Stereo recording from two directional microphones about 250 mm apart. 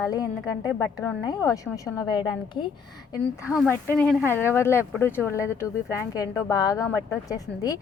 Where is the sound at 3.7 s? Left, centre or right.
Centre.